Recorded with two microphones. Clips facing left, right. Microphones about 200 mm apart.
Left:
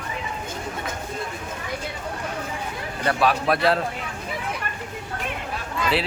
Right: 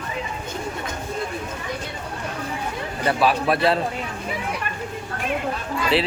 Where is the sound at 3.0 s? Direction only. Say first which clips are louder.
Right 1 dB; centre (ahead or behind).